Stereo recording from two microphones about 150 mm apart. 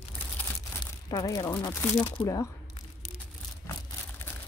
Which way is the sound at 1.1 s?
25° left (ahead or behind).